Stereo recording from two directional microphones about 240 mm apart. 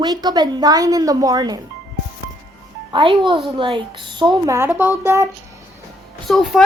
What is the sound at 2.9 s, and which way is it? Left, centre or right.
Speech, right.